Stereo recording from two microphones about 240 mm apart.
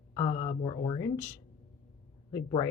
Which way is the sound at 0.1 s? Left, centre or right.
Left.